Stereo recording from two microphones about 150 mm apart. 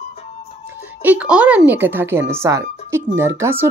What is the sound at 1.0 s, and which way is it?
Speech, 10° right (ahead or behind).